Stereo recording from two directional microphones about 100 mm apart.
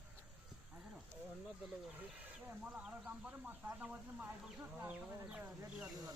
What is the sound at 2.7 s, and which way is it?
Speech, 10° right (ahead or behind).